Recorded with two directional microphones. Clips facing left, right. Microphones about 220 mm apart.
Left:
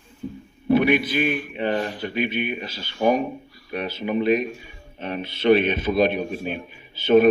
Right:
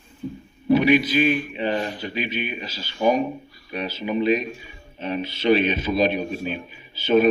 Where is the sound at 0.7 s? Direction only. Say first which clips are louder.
Right 1 dB; 55° left (ahead or behind).